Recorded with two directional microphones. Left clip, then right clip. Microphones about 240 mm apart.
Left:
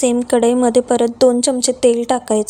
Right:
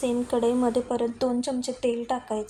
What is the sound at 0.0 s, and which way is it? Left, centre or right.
A woman's voice, left.